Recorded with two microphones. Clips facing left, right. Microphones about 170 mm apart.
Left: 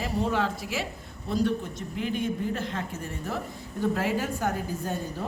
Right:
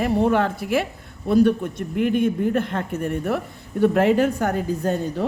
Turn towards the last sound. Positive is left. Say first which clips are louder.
# right 9 dB
turn(degrees=-75)  # may be behind; listen again after turning